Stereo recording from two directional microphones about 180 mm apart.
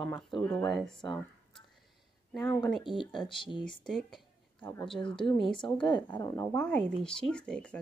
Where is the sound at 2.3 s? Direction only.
5° left (ahead or behind).